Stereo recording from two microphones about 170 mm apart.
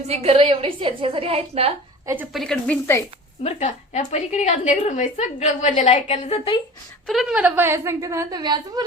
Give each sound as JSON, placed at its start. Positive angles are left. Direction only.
{"t": 0.1, "sound": "a woman's voice", "side_deg": -35}
{"t": 2.3, "sound": "speech", "side_deg": 5}
{"t": 3.4, "sound": "a woman's voice", "side_deg": 40}
{"t": 7.1, "sound": "a woman's voice", "side_deg": -5}